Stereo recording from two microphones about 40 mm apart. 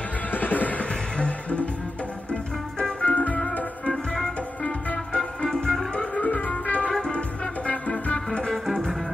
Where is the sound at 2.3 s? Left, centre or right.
Centre.